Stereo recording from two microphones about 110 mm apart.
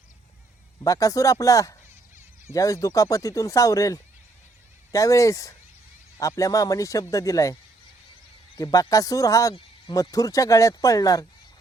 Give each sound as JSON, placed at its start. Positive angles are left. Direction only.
{"t": 0.9, "sound": "speech", "side_deg": 30}